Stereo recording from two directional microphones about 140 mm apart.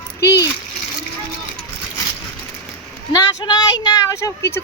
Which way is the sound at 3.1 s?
30° left (ahead or behind).